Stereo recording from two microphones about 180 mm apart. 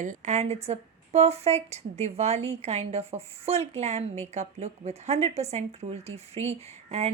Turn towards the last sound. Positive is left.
turn(degrees=-35)  # may be behind; listen again after turning